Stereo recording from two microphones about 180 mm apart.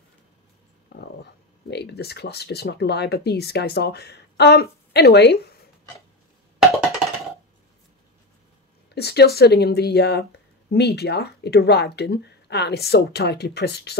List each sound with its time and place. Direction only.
0.9 s speech: 65° left (ahead or behind)
8.9 s speech: 65° left (ahead or behind)